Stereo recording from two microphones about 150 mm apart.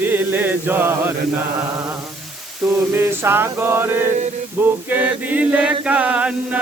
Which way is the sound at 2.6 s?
15° right (ahead or behind).